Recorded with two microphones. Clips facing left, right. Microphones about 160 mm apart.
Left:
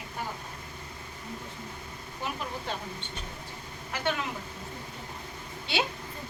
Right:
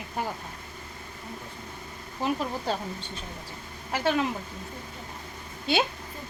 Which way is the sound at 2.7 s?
35° right (ahead or behind).